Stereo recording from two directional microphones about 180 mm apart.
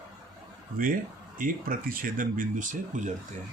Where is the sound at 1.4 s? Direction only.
50° right (ahead or behind).